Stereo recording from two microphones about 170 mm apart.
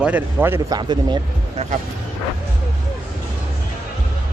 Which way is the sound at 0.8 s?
25° right (ahead or behind).